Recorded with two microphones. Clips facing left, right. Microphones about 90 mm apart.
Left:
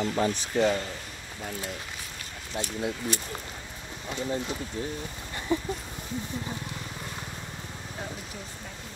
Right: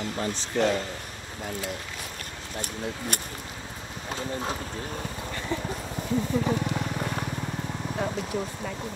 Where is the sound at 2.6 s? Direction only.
55° right (ahead or behind).